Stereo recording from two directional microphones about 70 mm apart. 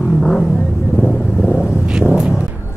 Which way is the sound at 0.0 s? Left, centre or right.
Centre.